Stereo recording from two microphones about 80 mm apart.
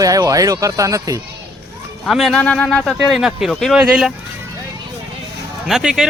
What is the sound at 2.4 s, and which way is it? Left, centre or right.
Speech, centre.